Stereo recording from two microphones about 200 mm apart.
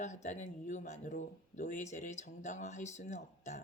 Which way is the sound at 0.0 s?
35° left (ahead or behind).